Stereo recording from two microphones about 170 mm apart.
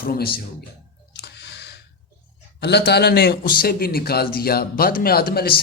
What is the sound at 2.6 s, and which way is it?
A man's voice, 75° left (ahead or behind).